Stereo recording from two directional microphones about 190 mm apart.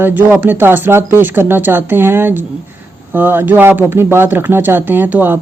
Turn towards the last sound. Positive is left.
turn(degrees=-10)  # may be behind; listen again after turning